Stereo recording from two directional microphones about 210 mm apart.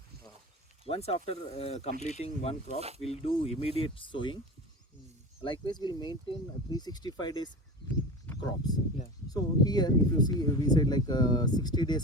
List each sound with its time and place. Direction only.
0.9 s speech: 30° left (ahead or behind)
5.4 s speech: 20° left (ahead or behind)